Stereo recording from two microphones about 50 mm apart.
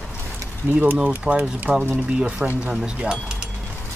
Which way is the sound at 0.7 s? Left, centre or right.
Right.